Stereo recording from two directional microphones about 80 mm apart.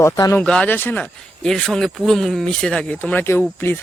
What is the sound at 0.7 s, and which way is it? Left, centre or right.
Speech, left.